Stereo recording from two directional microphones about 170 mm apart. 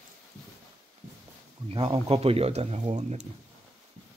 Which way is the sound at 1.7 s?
30° right (ahead or behind).